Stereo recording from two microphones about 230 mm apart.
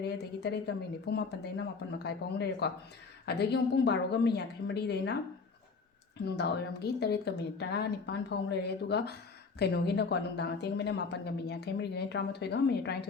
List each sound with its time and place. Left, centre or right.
0.0 s a woman's voice: left
6.2 s a woman's voice: left